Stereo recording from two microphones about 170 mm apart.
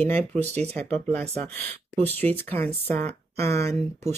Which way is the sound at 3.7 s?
40° right (ahead or behind).